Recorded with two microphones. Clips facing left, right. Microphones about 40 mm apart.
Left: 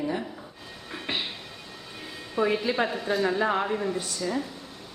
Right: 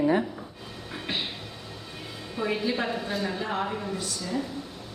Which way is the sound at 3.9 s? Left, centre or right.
Left.